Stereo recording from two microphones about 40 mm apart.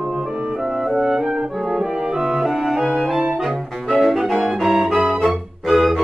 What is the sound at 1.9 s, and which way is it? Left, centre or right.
Music, right.